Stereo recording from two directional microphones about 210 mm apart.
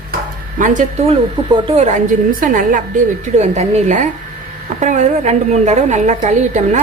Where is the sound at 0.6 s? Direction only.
35° right (ahead or behind).